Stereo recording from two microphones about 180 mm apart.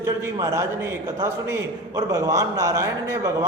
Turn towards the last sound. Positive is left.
turn(degrees=-15)  # may be behind; listen again after turning